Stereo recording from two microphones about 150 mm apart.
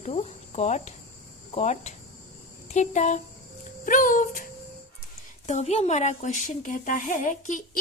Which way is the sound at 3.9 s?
65° left (ahead or behind).